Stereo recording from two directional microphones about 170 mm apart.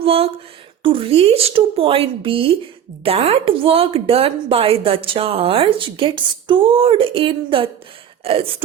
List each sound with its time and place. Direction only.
0.0 s a woman's voice: 35° right (ahead or behind)